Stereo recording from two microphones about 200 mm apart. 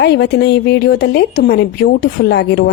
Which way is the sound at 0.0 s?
55° left (ahead or behind).